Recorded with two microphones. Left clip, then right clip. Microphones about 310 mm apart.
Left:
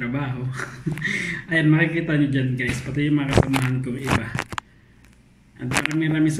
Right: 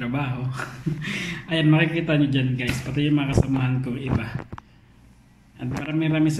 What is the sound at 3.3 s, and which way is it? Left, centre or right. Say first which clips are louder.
Speech: left 4 dB; left.